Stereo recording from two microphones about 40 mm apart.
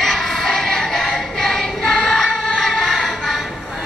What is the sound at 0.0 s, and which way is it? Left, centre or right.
Music, centre.